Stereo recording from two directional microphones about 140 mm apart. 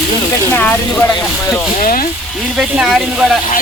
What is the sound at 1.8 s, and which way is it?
Speech, 85° left.